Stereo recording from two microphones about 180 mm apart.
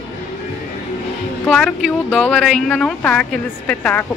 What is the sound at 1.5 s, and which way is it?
Speech, 5° left (ahead or behind).